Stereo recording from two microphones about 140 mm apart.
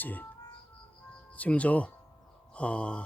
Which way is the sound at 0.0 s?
10° left (ahead or behind).